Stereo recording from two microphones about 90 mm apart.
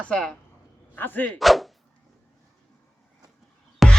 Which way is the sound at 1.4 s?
Centre (ahead or behind).